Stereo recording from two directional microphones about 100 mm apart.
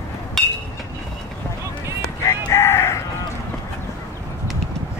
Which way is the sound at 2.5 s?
25° left (ahead or behind).